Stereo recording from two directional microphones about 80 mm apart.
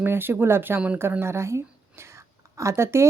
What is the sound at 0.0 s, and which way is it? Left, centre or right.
Speech, right.